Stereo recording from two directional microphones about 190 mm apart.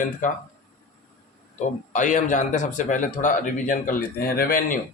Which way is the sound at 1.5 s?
40° left (ahead or behind).